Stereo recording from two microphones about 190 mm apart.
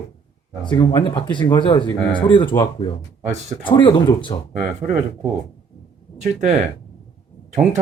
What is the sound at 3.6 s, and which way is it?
Speech, 25° left (ahead or behind).